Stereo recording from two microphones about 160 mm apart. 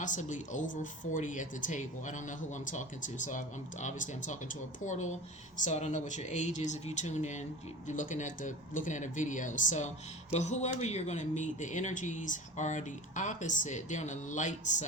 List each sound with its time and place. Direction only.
0.0 s speech: 50° left (ahead or behind)